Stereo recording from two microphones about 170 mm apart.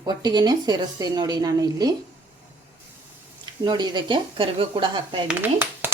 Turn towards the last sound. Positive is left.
turn(degrees=-10)  # may be behind; listen again after turning